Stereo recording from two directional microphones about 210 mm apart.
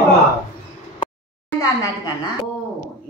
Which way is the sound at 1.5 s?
15° left (ahead or behind).